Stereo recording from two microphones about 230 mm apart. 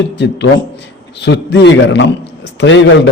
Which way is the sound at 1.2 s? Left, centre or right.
Left.